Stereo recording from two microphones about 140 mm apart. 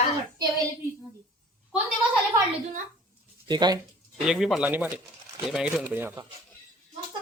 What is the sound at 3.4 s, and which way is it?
Speech, 30° right (ahead or behind).